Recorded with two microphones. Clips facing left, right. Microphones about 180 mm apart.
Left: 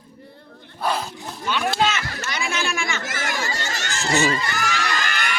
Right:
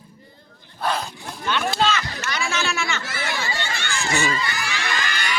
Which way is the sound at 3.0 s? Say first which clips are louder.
Left 1 dB; 45° left (ahead or behind).